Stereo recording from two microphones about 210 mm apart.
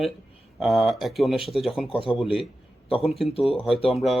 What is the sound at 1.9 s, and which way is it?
Speech, 25° left (ahead or behind).